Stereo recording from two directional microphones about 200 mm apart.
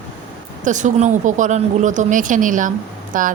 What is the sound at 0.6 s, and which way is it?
Speech, 35° right (ahead or behind).